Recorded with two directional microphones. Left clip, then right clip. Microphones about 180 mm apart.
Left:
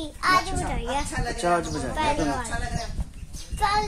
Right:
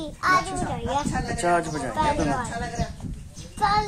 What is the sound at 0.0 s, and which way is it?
A child's voice, 10° left (ahead or behind).